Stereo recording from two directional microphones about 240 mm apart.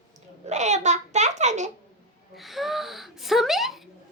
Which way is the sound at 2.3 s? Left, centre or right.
Centre.